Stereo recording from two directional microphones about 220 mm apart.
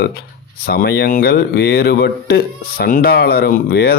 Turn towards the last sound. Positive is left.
turn(degrees=45)  # may be behind; listen again after turning